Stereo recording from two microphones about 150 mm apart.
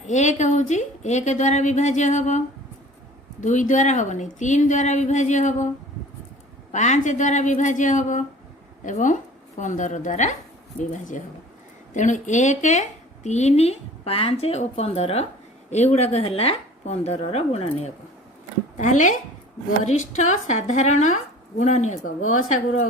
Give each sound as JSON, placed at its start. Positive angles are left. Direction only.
{"t": 0.1, "sound": "a woman's voice", "side_deg": 50}
{"t": 3.4, "sound": "a woman's voice", "side_deg": 55}
{"t": 6.7, "sound": "a woman's voice", "side_deg": 50}